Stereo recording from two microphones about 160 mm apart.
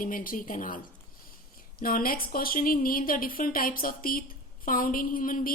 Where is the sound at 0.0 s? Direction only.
60° left (ahead or behind).